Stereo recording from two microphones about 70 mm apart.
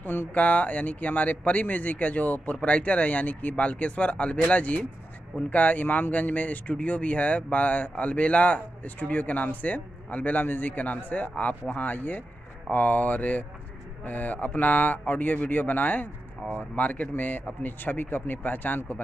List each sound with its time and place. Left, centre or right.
0.0 s speech: left